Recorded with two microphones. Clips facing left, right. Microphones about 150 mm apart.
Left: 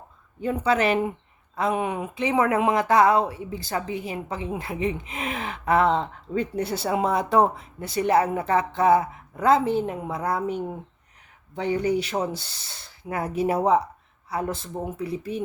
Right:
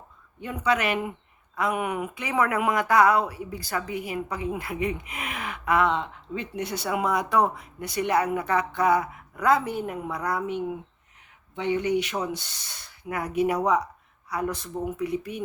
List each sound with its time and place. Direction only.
0.4 s a woman's voice: 30° left (ahead or behind)
10.4 s a woman's voice: 40° left (ahead or behind)